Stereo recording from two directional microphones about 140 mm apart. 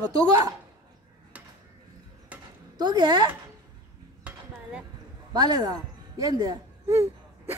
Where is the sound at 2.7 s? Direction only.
30° right (ahead or behind).